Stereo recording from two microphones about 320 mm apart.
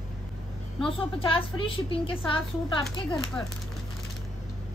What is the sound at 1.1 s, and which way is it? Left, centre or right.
A woman's voice, centre.